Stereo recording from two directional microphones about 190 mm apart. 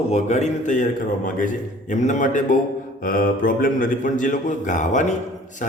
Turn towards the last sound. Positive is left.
turn(degrees=40)  # may be behind; listen again after turning